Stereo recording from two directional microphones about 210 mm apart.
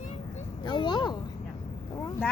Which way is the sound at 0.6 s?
20° left (ahead or behind).